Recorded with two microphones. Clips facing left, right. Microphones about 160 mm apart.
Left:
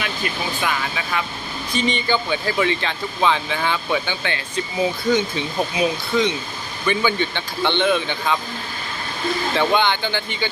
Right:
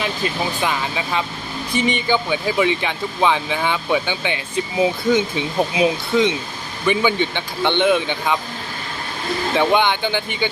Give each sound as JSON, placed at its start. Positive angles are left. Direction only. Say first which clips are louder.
{"t": 0.6, "sound": "speech", "louder": "right 2 dB", "side_deg": -25}
{"t": 9.6, "sound": "speech", "louder": "right 3 dB", "side_deg": -15}